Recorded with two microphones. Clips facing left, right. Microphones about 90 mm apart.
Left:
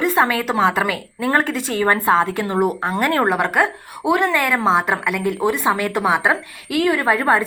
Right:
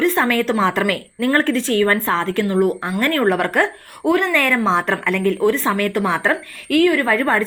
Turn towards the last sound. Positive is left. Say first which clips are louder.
# left 1 dB
turn(degrees=15)  # may be behind; listen again after turning